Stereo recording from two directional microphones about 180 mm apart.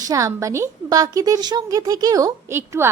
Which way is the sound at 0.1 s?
15° right (ahead or behind).